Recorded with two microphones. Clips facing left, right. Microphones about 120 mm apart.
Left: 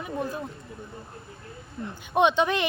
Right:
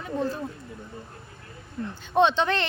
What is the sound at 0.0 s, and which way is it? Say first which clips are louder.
Speech: right 2 dB; 10° left (ahead or behind).